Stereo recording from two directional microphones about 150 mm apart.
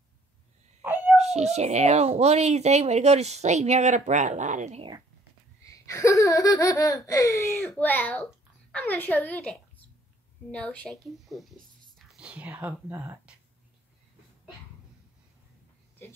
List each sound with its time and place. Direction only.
0.8 s a sound: 10° right (ahead or behind)
1.1 s speech: 45° right (ahead or behind)
5.6 s laughter: 20° left (ahead or behind)
8.7 s a woman's voice: 10° left (ahead or behind); by 13.3 s 15° right (ahead or behind)